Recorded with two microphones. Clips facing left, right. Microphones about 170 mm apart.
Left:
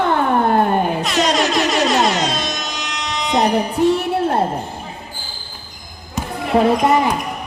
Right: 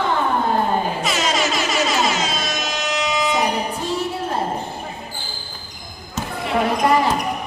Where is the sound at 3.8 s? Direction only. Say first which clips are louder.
Left 15 dB; 65° left (ahead or behind).